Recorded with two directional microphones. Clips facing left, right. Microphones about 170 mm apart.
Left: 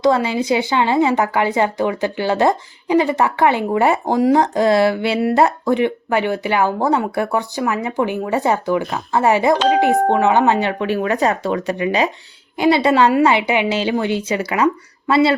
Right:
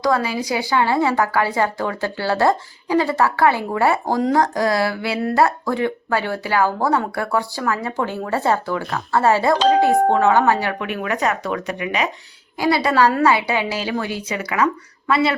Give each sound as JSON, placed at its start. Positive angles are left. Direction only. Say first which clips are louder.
{"t": 0.0, "sound": "speech", "louder": "left 4 dB", "side_deg": 25}